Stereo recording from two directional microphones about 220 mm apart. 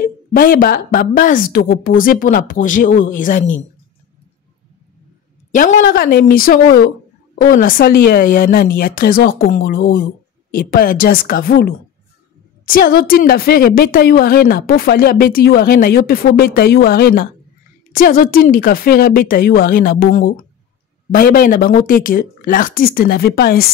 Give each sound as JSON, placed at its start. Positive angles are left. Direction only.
{"t": 0.0, "sound": "a woman's voice", "side_deg": 40}
{"t": 5.5, "sound": "a woman's voice", "side_deg": 35}